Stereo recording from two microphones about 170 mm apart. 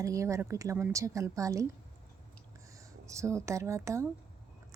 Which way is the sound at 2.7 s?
20° right (ahead or behind).